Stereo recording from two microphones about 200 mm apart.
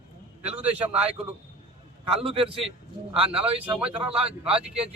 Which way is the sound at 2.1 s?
30° right (ahead or behind).